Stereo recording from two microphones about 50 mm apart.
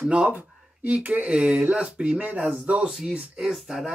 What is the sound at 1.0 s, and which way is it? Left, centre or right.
Speech, right.